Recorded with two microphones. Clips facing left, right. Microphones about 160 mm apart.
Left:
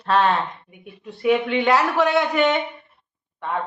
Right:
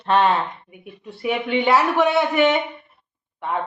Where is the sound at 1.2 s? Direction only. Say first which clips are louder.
Left 2 dB; 5° right (ahead or behind).